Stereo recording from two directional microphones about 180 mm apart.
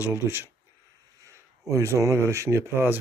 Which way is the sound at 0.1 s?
10° right (ahead or behind).